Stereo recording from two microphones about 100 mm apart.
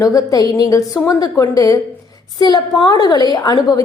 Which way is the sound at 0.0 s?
35° left (ahead or behind).